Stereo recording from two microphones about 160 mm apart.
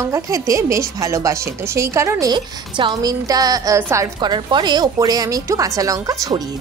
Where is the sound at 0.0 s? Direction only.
20° right (ahead or behind).